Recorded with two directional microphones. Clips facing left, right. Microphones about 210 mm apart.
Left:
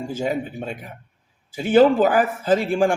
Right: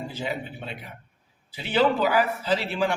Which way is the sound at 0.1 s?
45° left (ahead or behind).